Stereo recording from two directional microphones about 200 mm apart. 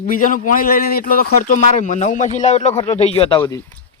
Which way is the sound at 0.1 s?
40° left (ahead or behind).